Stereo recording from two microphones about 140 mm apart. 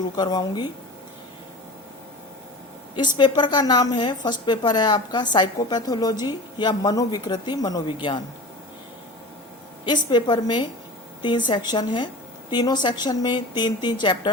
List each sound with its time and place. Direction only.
0.2 s a woman's voice: 30° left (ahead or behind)
2.9 s a woman's voice: 35° left (ahead or behind)
9.8 s a woman's voice: 30° left (ahead or behind)